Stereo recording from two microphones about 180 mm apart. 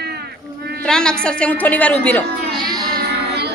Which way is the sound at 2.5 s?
25° right (ahead or behind).